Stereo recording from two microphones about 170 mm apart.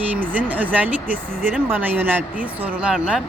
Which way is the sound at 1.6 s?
10° right (ahead or behind).